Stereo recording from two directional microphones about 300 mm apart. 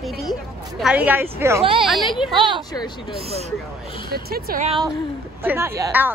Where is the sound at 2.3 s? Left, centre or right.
Centre.